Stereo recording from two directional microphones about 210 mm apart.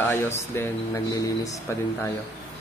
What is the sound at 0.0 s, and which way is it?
Speech, 10° left (ahead or behind).